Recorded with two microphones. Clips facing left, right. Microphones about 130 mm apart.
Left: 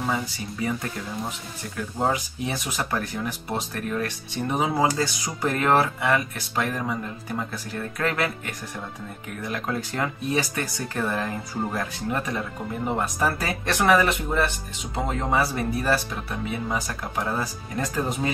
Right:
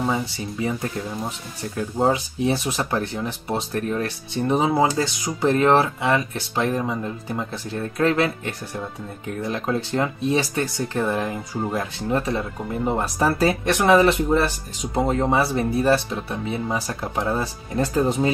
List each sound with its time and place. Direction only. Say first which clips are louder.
0.1 s speech: right 3 dB; 25° right (ahead or behind)
2.0 s speech: right 5 dB; 30° right (ahead or behind)
12.1 s speech: right 6 dB; 30° right (ahead or behind)